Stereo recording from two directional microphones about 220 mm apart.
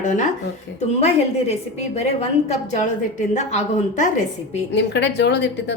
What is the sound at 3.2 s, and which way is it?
Speech, 30° left (ahead or behind).